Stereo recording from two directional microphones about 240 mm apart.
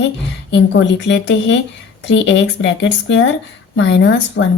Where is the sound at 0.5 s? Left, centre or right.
Left.